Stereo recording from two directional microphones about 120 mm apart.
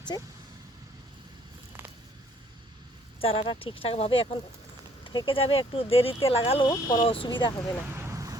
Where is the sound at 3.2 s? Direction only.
50° left (ahead or behind).